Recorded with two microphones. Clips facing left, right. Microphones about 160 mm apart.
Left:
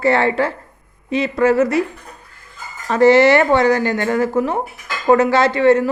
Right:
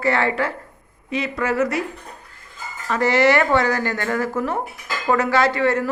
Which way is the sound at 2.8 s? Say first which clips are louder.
Left 6 dB; 30° left (ahead or behind).